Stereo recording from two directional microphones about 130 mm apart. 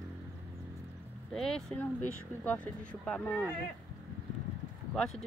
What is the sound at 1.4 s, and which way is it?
Speech, 5° left (ahead or behind).